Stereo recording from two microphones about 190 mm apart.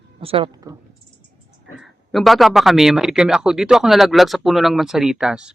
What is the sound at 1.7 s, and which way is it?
Speech, centre (ahead or behind).